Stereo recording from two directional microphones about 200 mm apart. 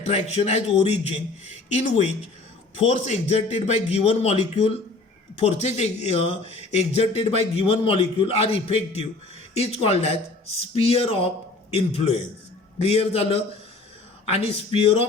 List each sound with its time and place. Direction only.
0.0 s a man's voice: 35° left (ahead or behind)